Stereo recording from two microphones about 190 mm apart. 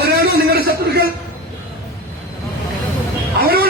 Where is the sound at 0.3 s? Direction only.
55° right (ahead or behind).